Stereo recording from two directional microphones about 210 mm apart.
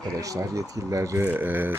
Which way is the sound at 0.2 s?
15° right (ahead or behind).